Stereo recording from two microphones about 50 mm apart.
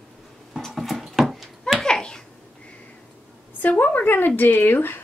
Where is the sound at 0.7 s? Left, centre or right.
Centre.